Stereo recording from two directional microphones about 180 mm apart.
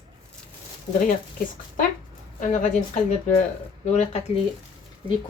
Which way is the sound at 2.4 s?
45° left (ahead or behind).